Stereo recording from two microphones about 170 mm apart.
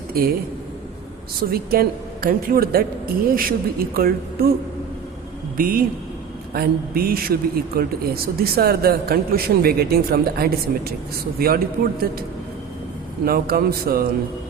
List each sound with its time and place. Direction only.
0.1 s a man's voice: 60° right (ahead or behind)
1.5 s a man's voice: 60° right (ahead or behind)
5.5 s a man's voice: 55° right (ahead or behind)
13.2 s a man's voice: 65° right (ahead or behind)